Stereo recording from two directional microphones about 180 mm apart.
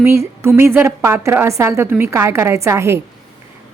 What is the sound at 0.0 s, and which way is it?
A woman's voice, 15° right (ahead or behind).